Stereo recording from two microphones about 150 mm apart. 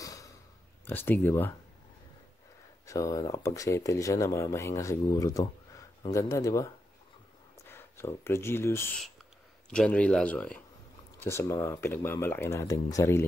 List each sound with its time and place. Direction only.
0.0 s a sound: 25° left (ahead or behind)
0.8 s speech: 15° left (ahead or behind)
2.9 s speech: 25° left (ahead or behind)